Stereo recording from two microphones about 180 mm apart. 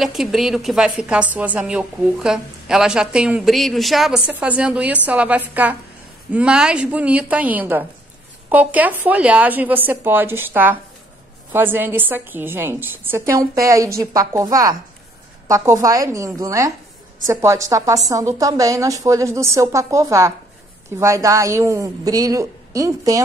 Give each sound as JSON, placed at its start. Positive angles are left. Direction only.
{"t": 0.0, "sound": "a woman's voice", "side_deg": 0}